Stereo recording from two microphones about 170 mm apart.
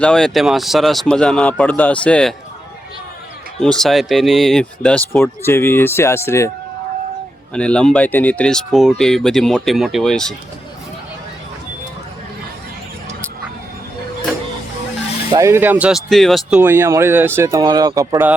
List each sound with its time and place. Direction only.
0.0 s speech: 5° left (ahead or behind)
3.6 s speech: 5° left (ahead or behind)
7.5 s speech: 5° left (ahead or behind)
15.3 s speech: 20° right (ahead or behind); by 16.6 s centre (ahead or behind)
16.6 s speech: 15° right (ahead or behind)